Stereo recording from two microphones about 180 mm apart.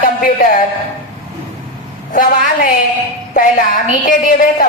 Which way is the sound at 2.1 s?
50° left (ahead or behind).